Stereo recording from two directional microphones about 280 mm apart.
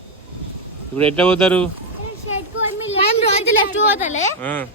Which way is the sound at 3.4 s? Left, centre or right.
Left.